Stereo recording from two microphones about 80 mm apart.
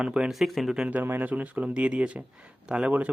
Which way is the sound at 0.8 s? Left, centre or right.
Right.